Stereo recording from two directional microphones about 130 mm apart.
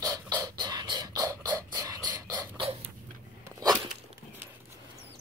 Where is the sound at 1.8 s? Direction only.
30° right (ahead or behind).